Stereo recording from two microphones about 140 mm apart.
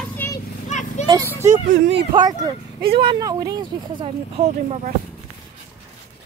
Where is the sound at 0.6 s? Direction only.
55° left (ahead or behind).